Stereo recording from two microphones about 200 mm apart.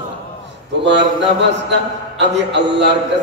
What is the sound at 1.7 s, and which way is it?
A man's voice, 60° right (ahead or behind).